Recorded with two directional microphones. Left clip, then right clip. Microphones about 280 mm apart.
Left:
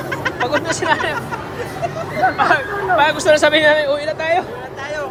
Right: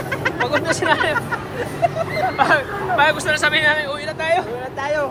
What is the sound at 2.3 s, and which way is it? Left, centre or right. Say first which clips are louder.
Speech: left 1 dB; centre.